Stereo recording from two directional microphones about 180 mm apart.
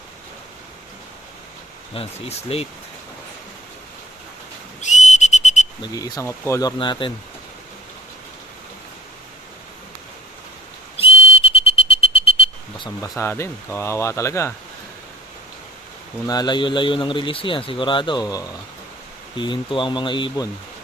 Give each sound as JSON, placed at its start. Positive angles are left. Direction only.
{"t": 1.9, "sound": "speech", "side_deg": 35}
{"t": 4.8, "sound": "whistle", "side_deg": 40}
{"t": 5.8, "sound": "speech", "side_deg": 20}
{"t": 10.9, "sound": "whistle", "side_deg": 30}
{"t": 13.0, "sound": "speech", "side_deg": 15}
{"t": 16.2, "sound": "speech", "side_deg": 20}